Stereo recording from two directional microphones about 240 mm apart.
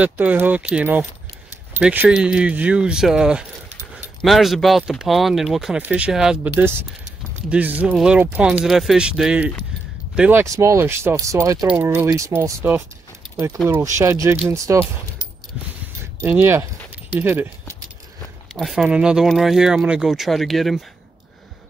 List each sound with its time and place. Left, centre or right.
0.0 s speech: centre
13.9 s speech: centre
16.2 s speech: centre
18.5 s speech: centre